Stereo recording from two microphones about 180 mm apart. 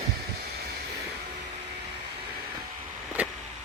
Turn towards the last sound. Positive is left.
turn(degrees=-10)  # may be behind; listen again after turning